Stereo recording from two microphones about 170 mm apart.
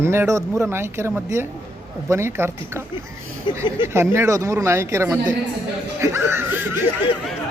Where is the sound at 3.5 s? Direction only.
30° left (ahead or behind).